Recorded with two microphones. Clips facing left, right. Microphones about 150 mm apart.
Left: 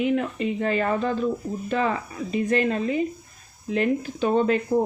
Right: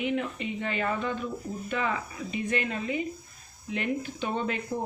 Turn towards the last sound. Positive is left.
turn(degrees=45)  # may be behind; listen again after turning